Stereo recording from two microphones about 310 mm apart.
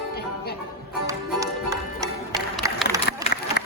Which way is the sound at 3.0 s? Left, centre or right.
Left.